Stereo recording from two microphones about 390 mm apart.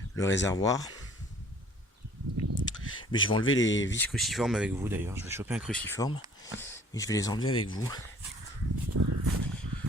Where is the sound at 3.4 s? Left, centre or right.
Left.